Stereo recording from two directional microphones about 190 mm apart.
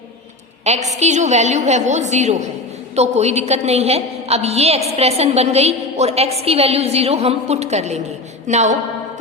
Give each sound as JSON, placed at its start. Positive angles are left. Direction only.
{"t": 0.6, "sound": "a woman's voice", "side_deg": -35}